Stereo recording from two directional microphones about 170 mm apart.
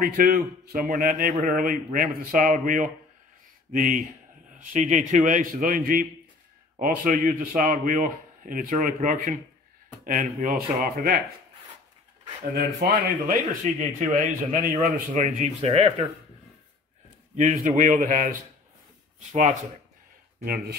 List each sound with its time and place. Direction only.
0.0 s a man's voice: 55° right (ahead or behind)
12.5 s speech: 60° right (ahead or behind)
13.7 s a man's voice: 50° right (ahead or behind)
17.4 s a man's voice: 50° right (ahead or behind)
20.4 s speech: 60° right (ahead or behind)